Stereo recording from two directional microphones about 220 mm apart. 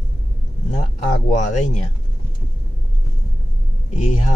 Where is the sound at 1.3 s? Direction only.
30° left (ahead or behind).